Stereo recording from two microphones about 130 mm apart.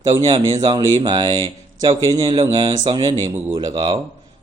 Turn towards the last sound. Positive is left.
turn(degrees=-40)  # may be behind; listen again after turning